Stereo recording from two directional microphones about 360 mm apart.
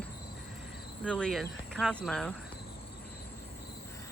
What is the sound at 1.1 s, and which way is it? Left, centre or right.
Speech, centre.